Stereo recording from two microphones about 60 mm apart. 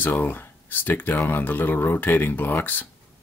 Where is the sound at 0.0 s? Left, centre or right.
Left.